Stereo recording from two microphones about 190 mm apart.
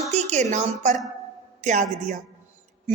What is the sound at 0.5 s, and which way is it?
A woman's voice, 40° right (ahead or behind).